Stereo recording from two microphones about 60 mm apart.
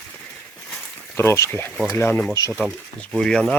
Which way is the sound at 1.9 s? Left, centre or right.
Left.